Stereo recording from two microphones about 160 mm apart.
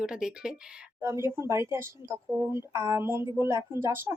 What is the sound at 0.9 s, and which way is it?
Speech, 15° right (ahead or behind).